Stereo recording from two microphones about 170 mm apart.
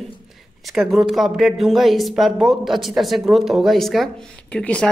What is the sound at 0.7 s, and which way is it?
Speech, centre (ahead or behind).